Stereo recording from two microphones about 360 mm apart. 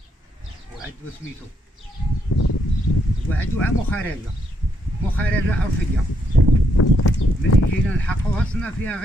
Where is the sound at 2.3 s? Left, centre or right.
Left.